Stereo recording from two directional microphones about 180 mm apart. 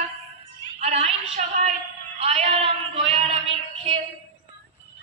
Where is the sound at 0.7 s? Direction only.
40° right (ahead or behind).